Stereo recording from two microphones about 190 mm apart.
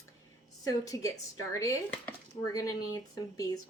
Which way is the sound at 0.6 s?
20° left (ahead or behind).